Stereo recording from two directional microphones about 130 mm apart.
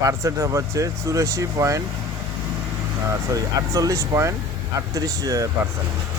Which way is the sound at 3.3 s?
25° right (ahead or behind).